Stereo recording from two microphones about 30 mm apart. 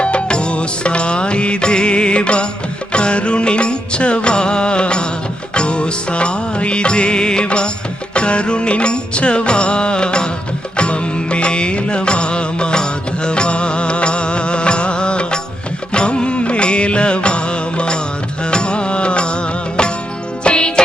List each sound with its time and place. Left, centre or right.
0.0 s music: left